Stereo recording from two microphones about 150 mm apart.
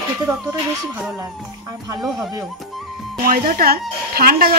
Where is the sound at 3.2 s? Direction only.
65° right (ahead or behind).